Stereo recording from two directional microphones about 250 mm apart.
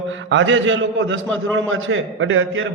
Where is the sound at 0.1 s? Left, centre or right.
Right.